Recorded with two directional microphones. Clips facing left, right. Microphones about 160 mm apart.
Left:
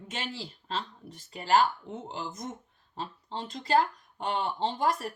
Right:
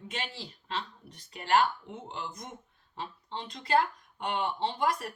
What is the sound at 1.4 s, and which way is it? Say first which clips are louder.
Speech: left 2 dB; 40° left (ahead or behind).